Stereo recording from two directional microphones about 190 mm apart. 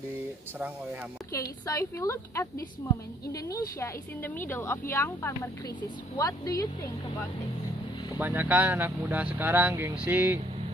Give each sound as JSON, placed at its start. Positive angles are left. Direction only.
{"t": 1.3, "sound": "a woman's voice", "side_deg": 15}
{"t": 8.2, "sound": "speech", "side_deg": -10}